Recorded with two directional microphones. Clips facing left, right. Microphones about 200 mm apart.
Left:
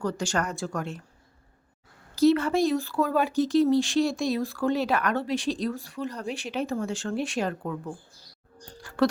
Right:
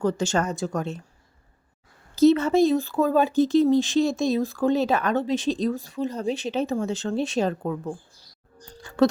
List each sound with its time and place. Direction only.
0.0 s speech: 25° right (ahead or behind)
2.1 s speech: 20° right (ahead or behind)